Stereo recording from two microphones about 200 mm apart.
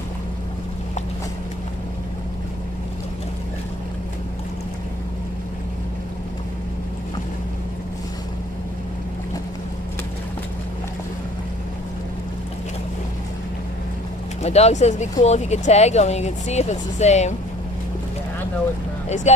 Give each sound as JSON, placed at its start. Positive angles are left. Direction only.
{"t": 14.4, "sound": "speech", "side_deg": 35}
{"t": 19.0, "sound": "speech", "side_deg": 35}